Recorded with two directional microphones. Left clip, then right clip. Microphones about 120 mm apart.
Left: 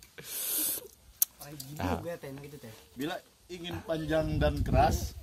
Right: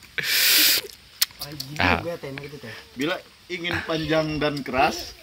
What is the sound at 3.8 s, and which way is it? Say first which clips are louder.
Speech: right 5 dB; 30° left (ahead or behind).